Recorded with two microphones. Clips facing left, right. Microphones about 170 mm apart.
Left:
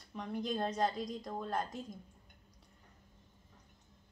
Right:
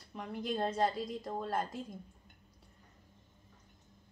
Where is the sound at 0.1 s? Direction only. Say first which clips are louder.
Even; 5° right (ahead or behind).